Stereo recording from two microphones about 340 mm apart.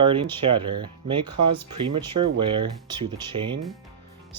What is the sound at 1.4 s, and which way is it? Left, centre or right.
Speech, right.